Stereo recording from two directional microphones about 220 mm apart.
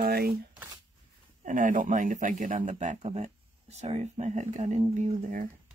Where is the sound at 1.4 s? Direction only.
35° right (ahead or behind).